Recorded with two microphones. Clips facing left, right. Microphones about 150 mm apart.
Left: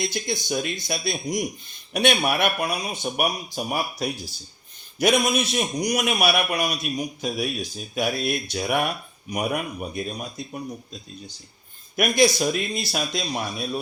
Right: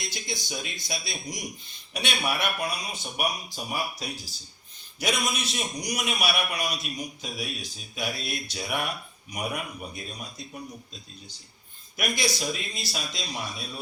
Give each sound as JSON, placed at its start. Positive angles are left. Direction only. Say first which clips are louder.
{"t": 0.0, "sound": "a man's voice", "louder": "left 8 dB", "side_deg": 55}
{"t": 11.9, "sound": "speech", "louder": "left 10 dB", "side_deg": 55}